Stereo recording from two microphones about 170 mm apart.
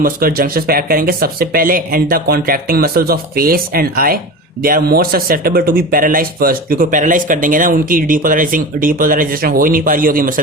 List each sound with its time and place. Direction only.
0.0 s speech: 60° right (ahead or behind)